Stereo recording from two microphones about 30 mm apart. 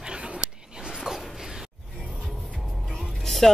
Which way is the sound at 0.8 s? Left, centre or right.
Centre.